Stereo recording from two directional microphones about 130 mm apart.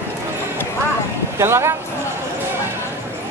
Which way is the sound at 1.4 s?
20° right (ahead or behind).